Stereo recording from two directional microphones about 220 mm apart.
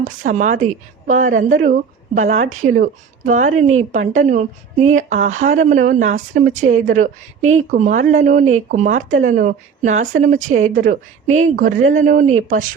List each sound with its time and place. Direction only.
0.0 s a woman's voice: 35° right (ahead or behind)